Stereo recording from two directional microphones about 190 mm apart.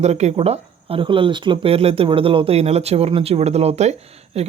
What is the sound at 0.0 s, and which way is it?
Speech, 35° right (ahead or behind).